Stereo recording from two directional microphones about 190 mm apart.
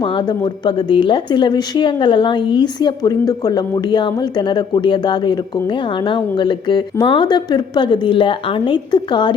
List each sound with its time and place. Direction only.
0.0 s speech: 25° left (ahead or behind)